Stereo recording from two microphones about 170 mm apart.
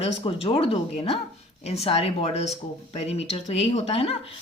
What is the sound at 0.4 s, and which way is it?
Speech, 35° left (ahead or behind).